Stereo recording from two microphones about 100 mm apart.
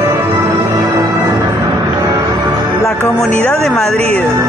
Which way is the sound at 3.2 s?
10° left (ahead or behind).